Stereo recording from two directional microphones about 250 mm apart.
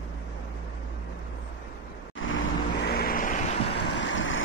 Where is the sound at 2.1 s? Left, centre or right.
Left.